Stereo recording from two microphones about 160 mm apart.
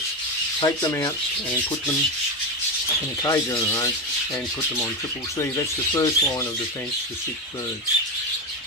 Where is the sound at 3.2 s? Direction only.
15° left (ahead or behind).